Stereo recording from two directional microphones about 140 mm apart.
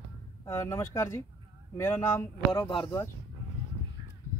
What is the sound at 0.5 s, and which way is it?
A man's voice, 20° left (ahead or behind).